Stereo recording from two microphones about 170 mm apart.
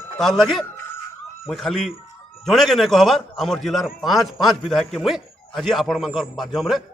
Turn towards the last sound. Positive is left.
turn(degrees=0)  # may be behind; listen again after turning